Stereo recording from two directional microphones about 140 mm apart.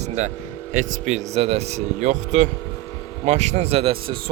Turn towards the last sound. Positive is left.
turn(degrees=-45)  # may be behind; listen again after turning